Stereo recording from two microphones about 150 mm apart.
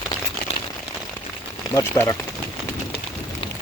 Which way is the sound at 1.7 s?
20° left (ahead or behind).